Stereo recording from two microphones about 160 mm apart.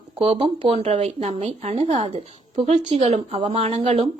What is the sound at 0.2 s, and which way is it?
A woman's voice, 40° right (ahead or behind).